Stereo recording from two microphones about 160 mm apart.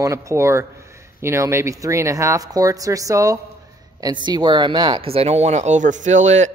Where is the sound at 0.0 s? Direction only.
20° right (ahead or behind).